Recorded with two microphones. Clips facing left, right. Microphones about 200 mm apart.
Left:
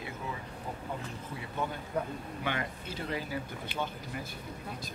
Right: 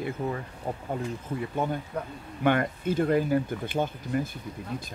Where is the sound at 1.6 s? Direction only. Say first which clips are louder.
Right 4 dB; 45° right (ahead or behind).